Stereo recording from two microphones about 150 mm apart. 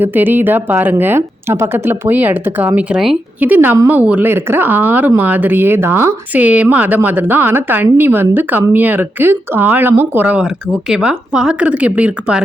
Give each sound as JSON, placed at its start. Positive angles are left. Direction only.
{"t": 0.0, "sound": "speech", "side_deg": -15}